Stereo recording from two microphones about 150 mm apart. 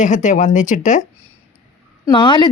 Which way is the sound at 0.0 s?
55° left (ahead or behind).